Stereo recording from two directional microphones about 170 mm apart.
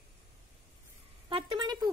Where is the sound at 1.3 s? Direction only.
30° right (ahead or behind).